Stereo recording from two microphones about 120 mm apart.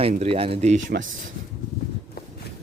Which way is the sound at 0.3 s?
50° right (ahead or behind).